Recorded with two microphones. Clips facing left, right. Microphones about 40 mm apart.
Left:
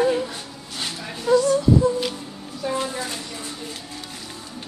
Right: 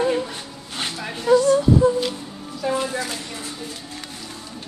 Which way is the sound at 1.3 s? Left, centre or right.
Right.